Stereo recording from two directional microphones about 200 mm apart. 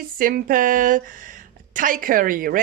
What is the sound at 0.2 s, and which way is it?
A woman's voice, 45° right (ahead or behind).